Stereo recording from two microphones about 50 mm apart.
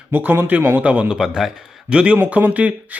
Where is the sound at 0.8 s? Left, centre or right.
Right.